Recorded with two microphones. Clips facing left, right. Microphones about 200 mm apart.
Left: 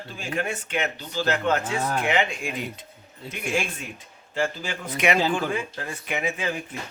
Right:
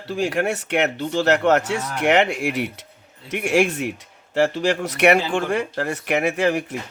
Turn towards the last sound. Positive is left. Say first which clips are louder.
# right 8 dB
turn(degrees=-80)